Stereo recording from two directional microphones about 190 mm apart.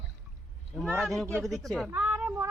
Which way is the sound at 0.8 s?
Centre (ahead or behind).